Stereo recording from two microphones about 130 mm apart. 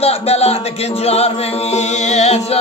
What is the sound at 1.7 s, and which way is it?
Music, 60° left (ahead or behind).